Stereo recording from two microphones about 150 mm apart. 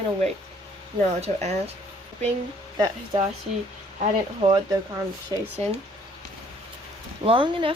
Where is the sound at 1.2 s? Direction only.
45° right (ahead or behind).